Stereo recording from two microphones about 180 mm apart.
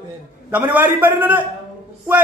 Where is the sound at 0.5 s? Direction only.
10° right (ahead or behind).